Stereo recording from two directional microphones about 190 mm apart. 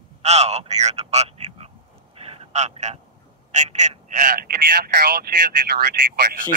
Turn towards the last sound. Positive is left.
turn(degrees=-55)  # may be behind; listen again after turning